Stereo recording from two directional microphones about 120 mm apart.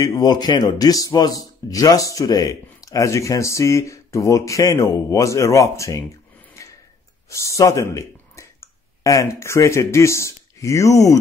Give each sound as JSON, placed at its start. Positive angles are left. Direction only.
{"t": 0.0, "sound": "a man's voice", "side_deg": 35}
{"t": 6.6, "sound": "tick-tock", "side_deg": 25}
{"t": 7.2, "sound": "speech", "side_deg": 25}